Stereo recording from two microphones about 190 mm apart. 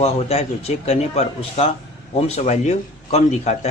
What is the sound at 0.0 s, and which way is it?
Speech, 30° left (ahead or behind).